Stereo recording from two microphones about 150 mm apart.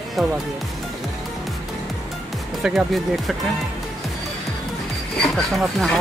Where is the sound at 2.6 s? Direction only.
Centre (ahead or behind).